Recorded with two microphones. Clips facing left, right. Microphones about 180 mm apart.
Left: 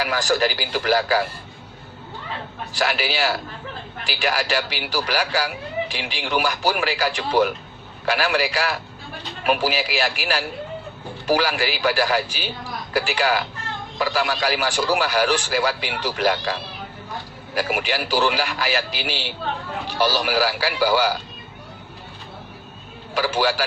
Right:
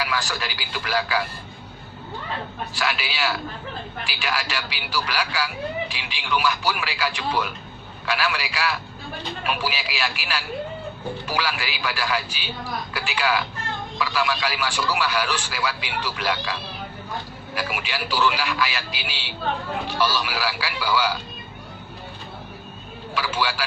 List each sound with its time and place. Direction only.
0.0 s a man's voice: 40° left (ahead or behind)
2.7 s a man's voice: 40° left (ahead or behind)
23.1 s a man's voice: 45° left (ahead or behind)